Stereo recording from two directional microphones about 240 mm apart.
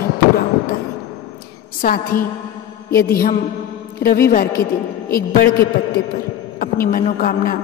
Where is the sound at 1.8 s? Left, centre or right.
Left.